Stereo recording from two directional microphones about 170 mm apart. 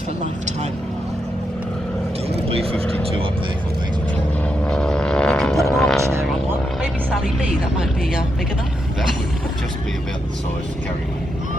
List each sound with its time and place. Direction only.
2.5 s speech: 35° right (ahead or behind)
4.6 s vehicle: 5° left (ahead or behind)